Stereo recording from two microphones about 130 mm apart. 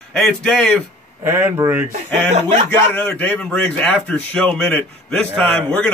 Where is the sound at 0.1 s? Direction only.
5° left (ahead or behind).